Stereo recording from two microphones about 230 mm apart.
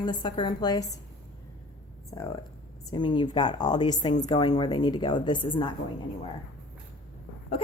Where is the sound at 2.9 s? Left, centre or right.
Left.